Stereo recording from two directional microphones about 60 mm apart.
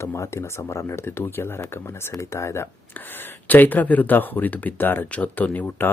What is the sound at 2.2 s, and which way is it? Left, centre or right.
Speech, left.